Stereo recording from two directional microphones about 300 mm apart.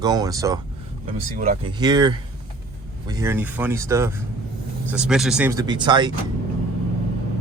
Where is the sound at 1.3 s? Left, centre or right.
Right.